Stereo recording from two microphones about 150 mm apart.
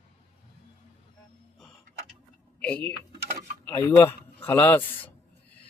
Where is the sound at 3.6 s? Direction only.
15° left (ahead or behind).